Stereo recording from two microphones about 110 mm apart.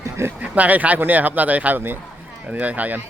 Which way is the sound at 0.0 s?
25° right (ahead or behind).